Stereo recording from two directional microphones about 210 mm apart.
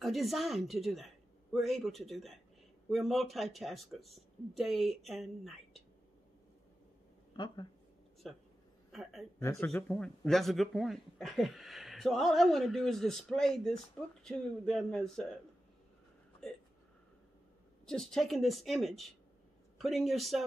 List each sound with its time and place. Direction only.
0.0 s speech: centre (ahead or behind)
7.3 s speech: 20° left (ahead or behind)
8.2 s speech: centre (ahead or behind)
9.4 s speech: 10° left (ahead or behind)
16.4 s speech: centre (ahead or behind)
17.8 s speech: centre (ahead or behind)